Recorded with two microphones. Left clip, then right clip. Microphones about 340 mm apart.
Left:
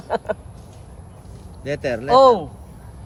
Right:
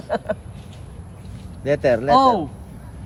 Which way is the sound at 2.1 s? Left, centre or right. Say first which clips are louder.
Left 4 dB; left.